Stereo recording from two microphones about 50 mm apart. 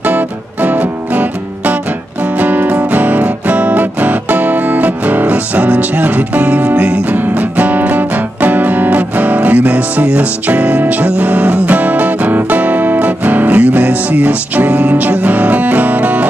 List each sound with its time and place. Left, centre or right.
0.0 s music: right
2.3 s music: right